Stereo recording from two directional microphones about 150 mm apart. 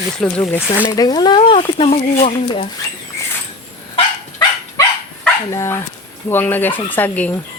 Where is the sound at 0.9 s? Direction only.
25° left (ahead or behind); by 2.6 s 45° left (ahead or behind).